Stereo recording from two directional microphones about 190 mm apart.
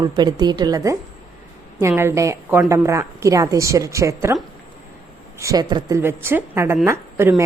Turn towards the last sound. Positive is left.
turn(degrees=-10)  # may be behind; listen again after turning